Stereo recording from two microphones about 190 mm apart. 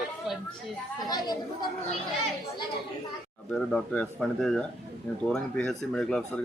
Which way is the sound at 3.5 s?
5° left (ahead or behind).